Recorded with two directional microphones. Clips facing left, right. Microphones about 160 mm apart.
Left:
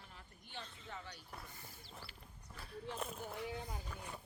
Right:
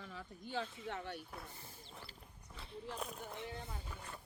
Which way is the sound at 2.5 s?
25° right (ahead or behind).